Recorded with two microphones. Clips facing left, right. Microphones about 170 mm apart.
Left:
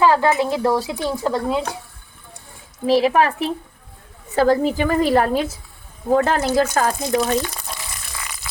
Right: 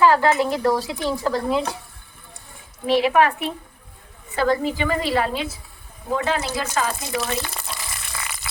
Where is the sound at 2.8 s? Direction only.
35° left (ahead or behind); by 6.9 s 50° left (ahead or behind).